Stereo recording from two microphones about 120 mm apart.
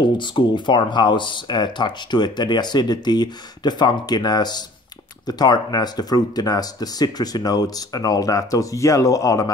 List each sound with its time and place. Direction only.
0.0 s speech: 40° left (ahead or behind)